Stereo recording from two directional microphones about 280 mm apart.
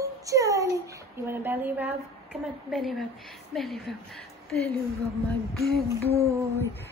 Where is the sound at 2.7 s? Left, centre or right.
Centre.